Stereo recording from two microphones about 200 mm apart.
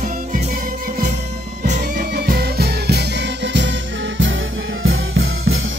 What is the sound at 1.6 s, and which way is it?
Music, 40° right (ahead or behind).